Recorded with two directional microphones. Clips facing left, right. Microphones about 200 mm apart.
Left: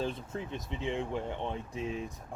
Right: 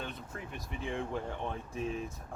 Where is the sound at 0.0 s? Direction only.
25° left (ahead or behind).